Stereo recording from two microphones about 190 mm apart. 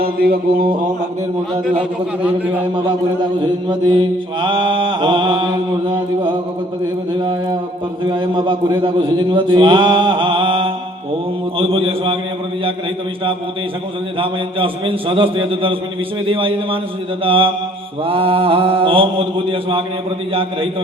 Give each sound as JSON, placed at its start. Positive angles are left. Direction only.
{"t": 0.0, "sound": "mantra", "side_deg": -55}
{"t": 3.7, "sound": "a man's voice", "side_deg": -25}
{"t": 8.0, "sound": "a man's voice", "side_deg": -25}
{"t": 14.2, "sound": "a man's voice", "side_deg": -30}